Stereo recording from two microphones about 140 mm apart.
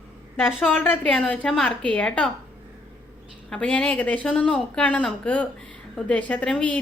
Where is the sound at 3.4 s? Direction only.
5° left (ahead or behind).